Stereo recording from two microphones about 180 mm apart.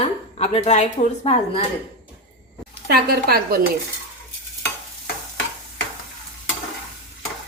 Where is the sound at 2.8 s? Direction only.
60° right (ahead or behind).